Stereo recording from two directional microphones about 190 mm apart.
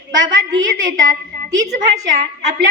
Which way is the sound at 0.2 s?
20° right (ahead or behind).